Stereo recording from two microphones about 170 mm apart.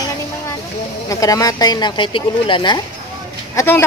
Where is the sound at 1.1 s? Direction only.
20° left (ahead or behind).